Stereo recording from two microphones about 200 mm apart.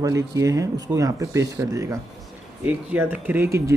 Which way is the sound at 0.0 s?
15° right (ahead or behind).